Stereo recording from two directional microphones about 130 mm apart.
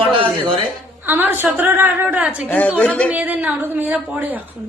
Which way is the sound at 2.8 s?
10° left (ahead or behind).